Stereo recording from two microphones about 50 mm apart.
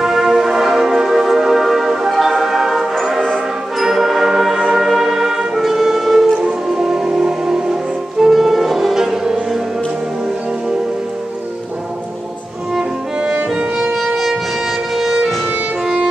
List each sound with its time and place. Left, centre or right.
0.0 s music: centre
13.2 s music: right
15.0 s music: centre